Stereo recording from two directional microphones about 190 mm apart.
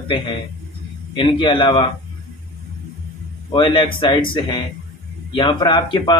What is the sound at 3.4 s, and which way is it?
Speech, 25° left (ahead or behind).